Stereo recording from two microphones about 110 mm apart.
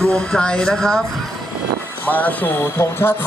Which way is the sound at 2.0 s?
15° left (ahead or behind).